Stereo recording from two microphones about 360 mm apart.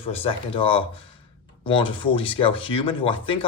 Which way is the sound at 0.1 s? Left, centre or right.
Centre.